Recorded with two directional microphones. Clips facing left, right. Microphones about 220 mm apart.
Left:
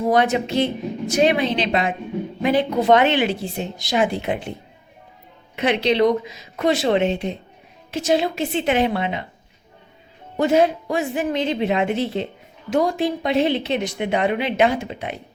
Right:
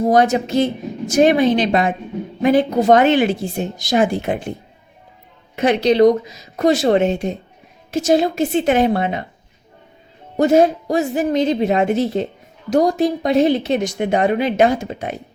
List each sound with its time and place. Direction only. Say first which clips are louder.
0.0 s a woman's voice: right 3 dB; 40° right (ahead or behind)
5.5 s a woman's voice: right 5 dB; 45° right (ahead or behind)
10.3 s a woman's voice: right 4 dB; 45° right (ahead or behind)